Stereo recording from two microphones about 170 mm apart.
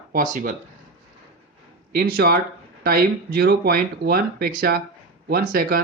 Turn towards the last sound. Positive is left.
turn(degrees=-60)  # may be behind; listen again after turning